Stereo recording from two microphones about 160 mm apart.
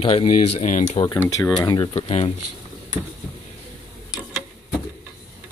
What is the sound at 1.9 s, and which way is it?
Speech, 40° left (ahead or behind).